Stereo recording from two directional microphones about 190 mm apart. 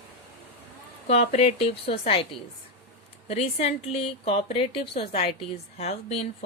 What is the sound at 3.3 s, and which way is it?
A woman's voice, 35° left (ahead or behind).